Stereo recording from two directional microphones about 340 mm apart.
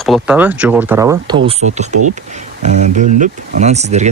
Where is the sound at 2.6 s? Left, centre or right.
Right.